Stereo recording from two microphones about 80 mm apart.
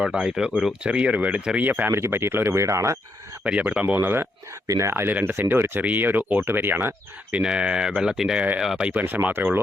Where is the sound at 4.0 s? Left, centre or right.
Right.